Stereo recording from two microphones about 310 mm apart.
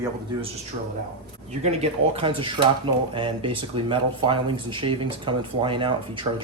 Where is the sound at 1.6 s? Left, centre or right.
Centre.